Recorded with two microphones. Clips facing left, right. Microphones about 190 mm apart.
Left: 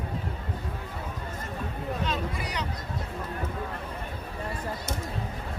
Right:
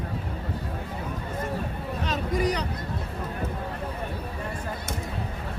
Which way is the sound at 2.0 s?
40° right (ahead or behind).